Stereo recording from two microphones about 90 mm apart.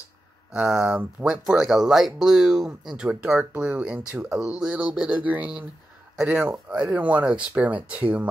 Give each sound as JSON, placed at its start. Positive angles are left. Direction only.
{"t": 0.5, "sound": "speech", "side_deg": -10}